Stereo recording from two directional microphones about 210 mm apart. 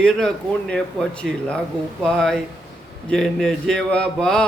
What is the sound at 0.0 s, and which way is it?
Mantra, 5° left (ahead or behind).